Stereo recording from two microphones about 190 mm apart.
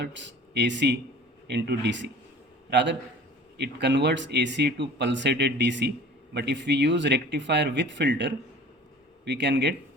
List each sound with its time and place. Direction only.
0.0 s a man's voice: 70° right (ahead or behind)